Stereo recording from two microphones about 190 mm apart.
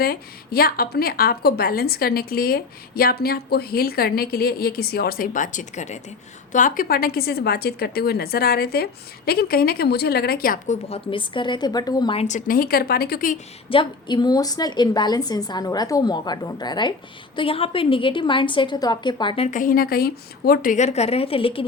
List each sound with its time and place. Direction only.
0.0 s a woman's voice: 55° left (ahead or behind)
10.8 s a woman's voice: 30° left (ahead or behind); by 13.4 s 45° left (ahead or behind)
13.7 s a woman's voice: 25° left (ahead or behind)
19.5 s speech: 45° left (ahead or behind); by 21.6 s 30° left (ahead or behind)